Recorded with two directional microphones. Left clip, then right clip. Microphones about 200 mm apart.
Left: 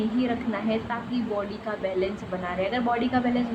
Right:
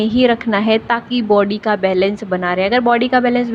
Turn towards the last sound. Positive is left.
turn(degrees=-35)  # may be behind; listen again after turning